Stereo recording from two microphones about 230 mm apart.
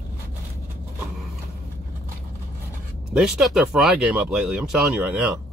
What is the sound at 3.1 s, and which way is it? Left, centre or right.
Speech, centre.